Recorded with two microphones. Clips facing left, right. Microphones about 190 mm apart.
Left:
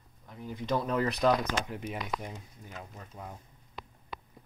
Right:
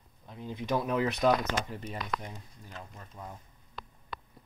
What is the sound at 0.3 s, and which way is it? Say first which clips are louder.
Speech: right 1 dB; 20° right (ahead or behind).